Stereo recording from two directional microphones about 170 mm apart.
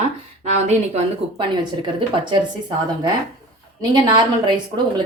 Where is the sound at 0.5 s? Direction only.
40° right (ahead or behind).